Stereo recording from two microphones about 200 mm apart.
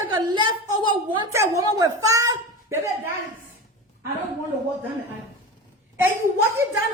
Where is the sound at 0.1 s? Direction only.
20° right (ahead or behind).